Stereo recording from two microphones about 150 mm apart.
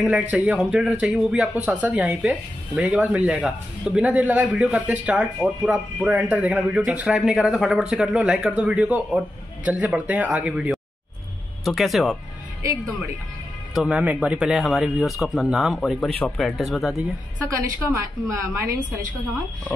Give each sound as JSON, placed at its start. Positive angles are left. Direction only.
{"t": 0.0, "sound": "speech", "side_deg": -5}
{"t": 13.7, "sound": "speech", "side_deg": -10}
{"t": 17.8, "sound": "a woman's voice", "side_deg": -15}